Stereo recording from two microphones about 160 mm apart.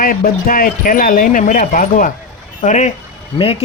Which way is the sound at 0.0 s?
60° left (ahead or behind).